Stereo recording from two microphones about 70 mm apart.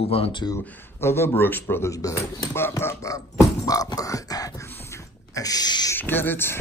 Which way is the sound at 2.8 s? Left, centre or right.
Left.